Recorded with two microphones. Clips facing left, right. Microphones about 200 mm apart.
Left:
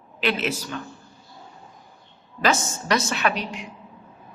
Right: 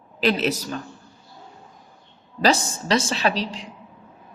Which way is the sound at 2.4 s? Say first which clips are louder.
Right 3 dB; 35° right (ahead or behind).